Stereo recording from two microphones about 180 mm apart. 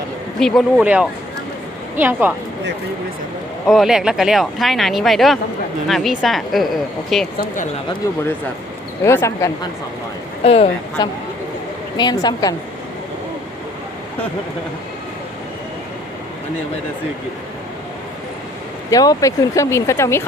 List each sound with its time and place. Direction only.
0.3 s a woman's voice: centre (ahead or behind)
3.7 s speech: centre (ahead or behind)
9.0 s speech: 15° left (ahead or behind)
10.4 s a woman's voice: 35° left (ahead or behind)
11.9 s a woman's voice: 20° left (ahead or behind)
18.9 s speech: 20° left (ahead or behind)